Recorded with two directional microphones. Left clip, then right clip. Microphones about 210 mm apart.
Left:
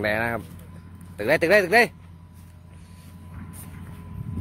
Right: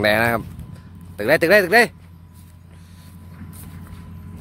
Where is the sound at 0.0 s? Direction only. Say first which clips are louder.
Right 7 dB; 50° right (ahead or behind).